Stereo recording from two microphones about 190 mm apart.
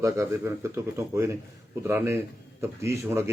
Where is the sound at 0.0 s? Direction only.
15° right (ahead or behind).